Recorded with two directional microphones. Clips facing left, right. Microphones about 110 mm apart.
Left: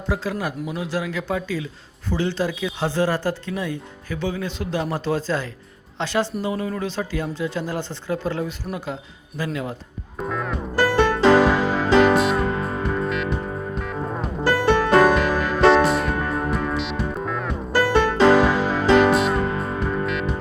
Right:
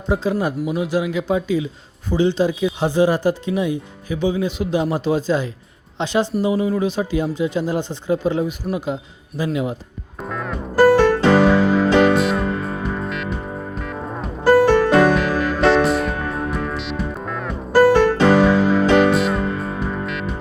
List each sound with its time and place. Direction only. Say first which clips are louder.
0.1 s speech: right 6 dB; 20° right (ahead or behind)
10.2 s music: even; centre (ahead or behind)